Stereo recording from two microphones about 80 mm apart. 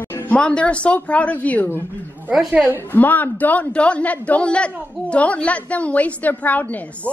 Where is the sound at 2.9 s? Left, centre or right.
Left.